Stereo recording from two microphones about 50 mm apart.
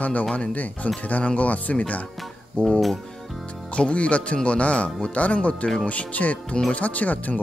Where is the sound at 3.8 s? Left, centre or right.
Left.